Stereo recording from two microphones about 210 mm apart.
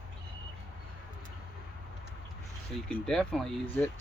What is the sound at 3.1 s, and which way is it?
Speech, centre (ahead or behind).